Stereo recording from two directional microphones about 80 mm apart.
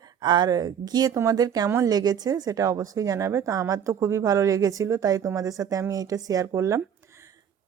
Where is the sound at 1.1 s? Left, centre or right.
Right.